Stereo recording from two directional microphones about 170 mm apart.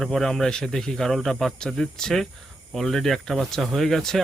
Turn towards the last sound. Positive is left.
turn(degrees=0)  # may be behind; listen again after turning